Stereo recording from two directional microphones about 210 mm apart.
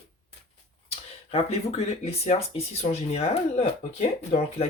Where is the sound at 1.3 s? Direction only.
30° left (ahead or behind).